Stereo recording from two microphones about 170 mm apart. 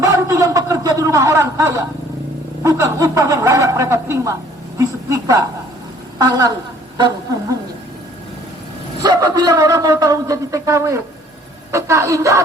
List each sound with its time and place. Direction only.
0.0 s a sound: 15° right (ahead or behind)
2.6 s speech: 20° right (ahead or behind)
9.0 s speech: 25° right (ahead or behind)